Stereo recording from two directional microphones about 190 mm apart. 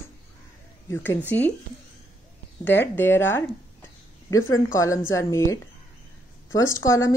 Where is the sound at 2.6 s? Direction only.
10° left (ahead or behind).